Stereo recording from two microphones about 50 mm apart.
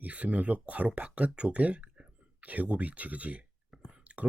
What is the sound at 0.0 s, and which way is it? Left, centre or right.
Speech, right.